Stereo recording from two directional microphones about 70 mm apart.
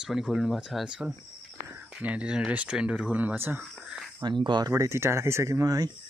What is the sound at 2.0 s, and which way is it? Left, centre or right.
Speech, centre.